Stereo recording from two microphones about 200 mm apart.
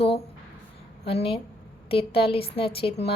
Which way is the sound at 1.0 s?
30° left (ahead or behind).